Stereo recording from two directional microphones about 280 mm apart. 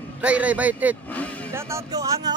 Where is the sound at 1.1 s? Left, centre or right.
Centre.